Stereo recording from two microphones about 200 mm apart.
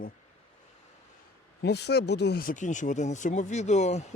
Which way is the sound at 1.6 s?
55° left (ahead or behind).